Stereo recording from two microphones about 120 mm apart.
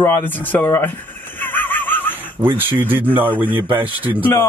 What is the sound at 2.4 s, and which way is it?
Speech, 20° right (ahead or behind).